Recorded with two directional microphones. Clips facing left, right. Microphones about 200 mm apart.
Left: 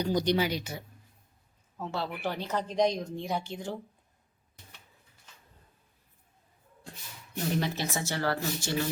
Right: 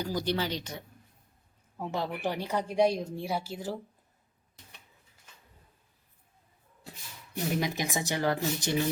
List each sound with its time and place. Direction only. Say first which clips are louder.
0.0 s speech: left 4 dB; 20° left (ahead or behind)
1.8 s speech: right 1 dB; 15° right (ahead or behind)
7.3 s speech: even; 10° right (ahead or behind)